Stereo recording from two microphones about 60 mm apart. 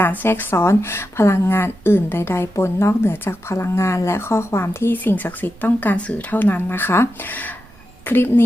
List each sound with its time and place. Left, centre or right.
0.0 s speech: left
0.5 s a woman's voice: left